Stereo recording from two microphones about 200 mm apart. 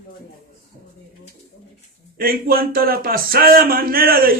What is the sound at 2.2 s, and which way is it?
Speech, 50° right (ahead or behind).